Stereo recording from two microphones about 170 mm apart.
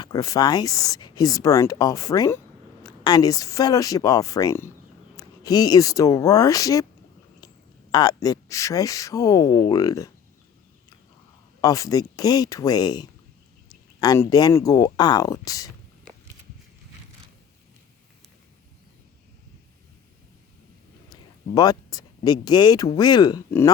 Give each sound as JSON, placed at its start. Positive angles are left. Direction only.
{"t": 0.0, "sound": "speech", "side_deg": 20}
{"t": 11.6, "sound": "speech", "side_deg": 20}
{"t": 21.1, "sound": "speech", "side_deg": 20}